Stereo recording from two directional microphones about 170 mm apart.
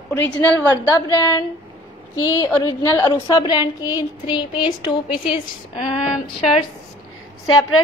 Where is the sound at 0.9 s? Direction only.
20° left (ahead or behind).